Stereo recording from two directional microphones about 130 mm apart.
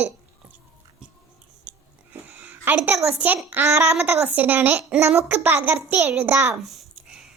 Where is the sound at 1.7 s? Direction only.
10° right (ahead or behind).